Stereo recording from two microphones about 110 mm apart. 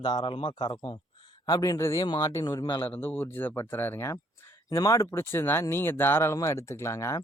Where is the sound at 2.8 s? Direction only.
20° left (ahead or behind).